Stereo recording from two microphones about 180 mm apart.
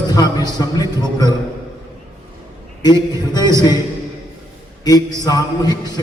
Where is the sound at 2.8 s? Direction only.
25° left (ahead or behind).